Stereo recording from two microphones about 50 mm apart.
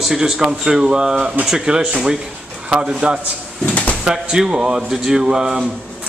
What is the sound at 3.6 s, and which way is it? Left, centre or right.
Drawer open or close, left.